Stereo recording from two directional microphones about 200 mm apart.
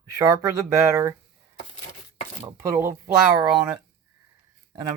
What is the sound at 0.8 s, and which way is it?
Speech, 15° right (ahead or behind).